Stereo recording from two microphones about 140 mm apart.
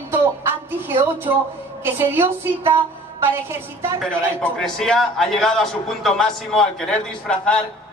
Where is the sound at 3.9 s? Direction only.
5° left (ahead or behind).